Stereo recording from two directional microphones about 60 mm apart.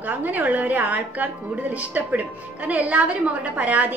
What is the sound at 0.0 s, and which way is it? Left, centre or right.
A woman's voice, right.